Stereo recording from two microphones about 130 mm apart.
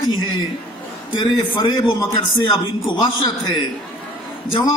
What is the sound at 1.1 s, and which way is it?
A man's voice, 40° left (ahead or behind).